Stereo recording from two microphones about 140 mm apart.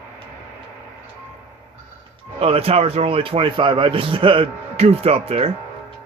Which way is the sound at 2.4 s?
45° right (ahead or behind).